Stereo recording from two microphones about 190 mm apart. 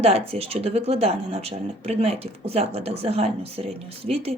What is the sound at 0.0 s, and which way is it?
Speech, 30° right (ahead or behind).